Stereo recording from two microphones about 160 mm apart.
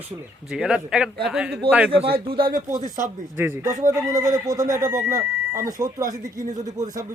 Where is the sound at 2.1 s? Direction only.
35° right (ahead or behind).